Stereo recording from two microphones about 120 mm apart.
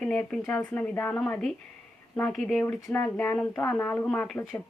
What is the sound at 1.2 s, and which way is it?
Speech, centre (ahead or behind).